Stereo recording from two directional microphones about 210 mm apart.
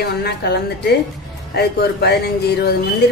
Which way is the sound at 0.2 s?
50° left (ahead or behind).